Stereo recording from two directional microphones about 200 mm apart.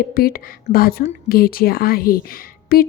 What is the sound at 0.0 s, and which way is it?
Speech, 50° left (ahead or behind).